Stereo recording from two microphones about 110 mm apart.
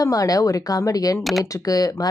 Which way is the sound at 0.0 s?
35° left (ahead or behind).